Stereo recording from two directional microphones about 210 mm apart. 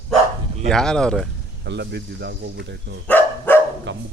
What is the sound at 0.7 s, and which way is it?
Speech, 5° left (ahead or behind).